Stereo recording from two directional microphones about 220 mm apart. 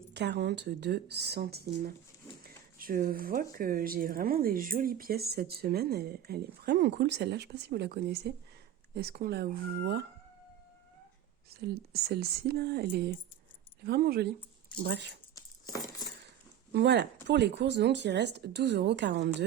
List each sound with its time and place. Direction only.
0.1 s speech: 50° right (ahead or behind)
11.6 s speech: 45° right (ahead or behind)
16.7 s speech: 50° right (ahead or behind)